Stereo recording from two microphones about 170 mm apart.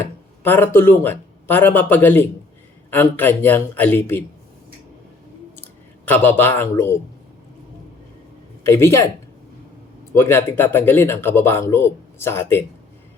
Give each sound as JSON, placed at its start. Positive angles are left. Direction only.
{"t": 0.4, "sound": "speech", "side_deg": 10}
{"t": 6.1, "sound": "speech", "side_deg": 10}
{"t": 8.6, "sound": "speech", "side_deg": 15}
{"t": 10.2, "sound": "speech", "side_deg": 15}